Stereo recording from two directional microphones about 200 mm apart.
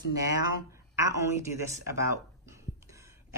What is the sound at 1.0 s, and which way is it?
Speech, 15° right (ahead or behind).